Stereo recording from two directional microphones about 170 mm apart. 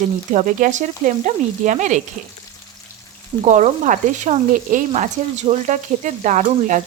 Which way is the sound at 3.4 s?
45° right (ahead or behind).